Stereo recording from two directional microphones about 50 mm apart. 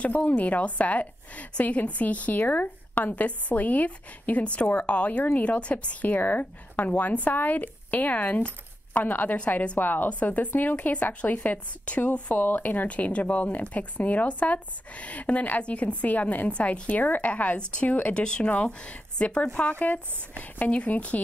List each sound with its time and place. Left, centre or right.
0.0 s a woman's voice: left
18.1 s speech: left